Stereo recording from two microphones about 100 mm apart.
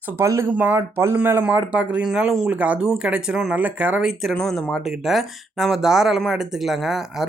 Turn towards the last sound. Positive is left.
turn(degrees=-5)  # may be behind; listen again after turning